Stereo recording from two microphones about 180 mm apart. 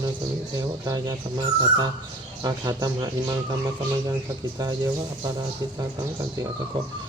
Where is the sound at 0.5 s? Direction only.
20° right (ahead or behind).